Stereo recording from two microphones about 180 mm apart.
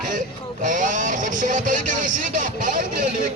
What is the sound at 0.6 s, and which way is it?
Speech, 45° right (ahead or behind).